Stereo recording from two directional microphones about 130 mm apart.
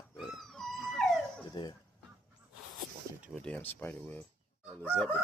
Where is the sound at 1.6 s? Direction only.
40° left (ahead or behind).